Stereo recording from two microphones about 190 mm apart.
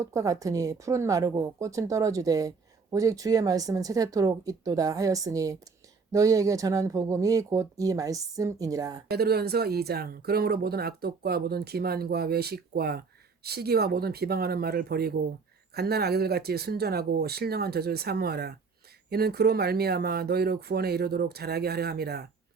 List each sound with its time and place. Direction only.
0.0 s speech: 15° right (ahead or behind)
9.0 s speech: 55° right (ahead or behind)